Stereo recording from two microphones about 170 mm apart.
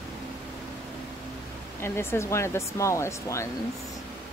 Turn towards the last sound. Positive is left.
turn(degrees=15)  # may be behind; listen again after turning